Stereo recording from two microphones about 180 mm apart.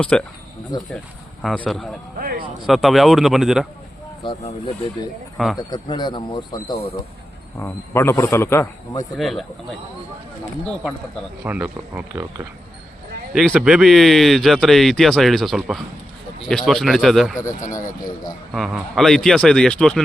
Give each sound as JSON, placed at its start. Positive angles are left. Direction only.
{"t": 0.0, "sound": "speech", "side_deg": 5}
{"t": 2.1, "sound": "speech", "side_deg": -55}
{"t": 2.6, "sound": "speech", "side_deg": 0}
{"t": 4.2, "sound": "speech", "side_deg": 30}
{"t": 9.1, "sound": "speech", "side_deg": 0}
{"t": 11.4, "sound": "speech", "side_deg": -10}
{"t": 13.3, "sound": "speech", "side_deg": 0}
{"t": 18.5, "sound": "speech", "side_deg": 0}